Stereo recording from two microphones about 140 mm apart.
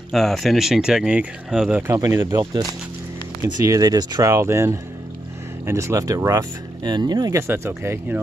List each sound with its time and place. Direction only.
0.1 s speech: centre (ahead or behind); by 2.4 s 20° right (ahead or behind)
3.6 s speech: 25° right (ahead or behind)
7.4 s speech: 15° right (ahead or behind)